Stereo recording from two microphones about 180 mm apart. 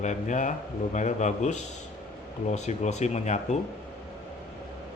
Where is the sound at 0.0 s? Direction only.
40° left (ahead or behind).